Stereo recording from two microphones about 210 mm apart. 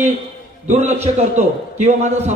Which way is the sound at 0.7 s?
30° right (ahead or behind).